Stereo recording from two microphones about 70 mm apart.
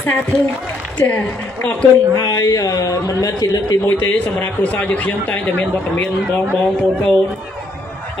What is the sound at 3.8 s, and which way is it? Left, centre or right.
A man's voice, left.